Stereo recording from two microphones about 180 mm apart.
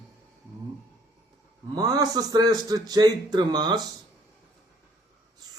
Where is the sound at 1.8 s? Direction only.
20° right (ahead or behind).